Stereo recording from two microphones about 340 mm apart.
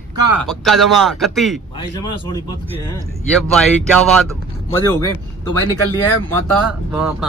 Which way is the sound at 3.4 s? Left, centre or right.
Centre.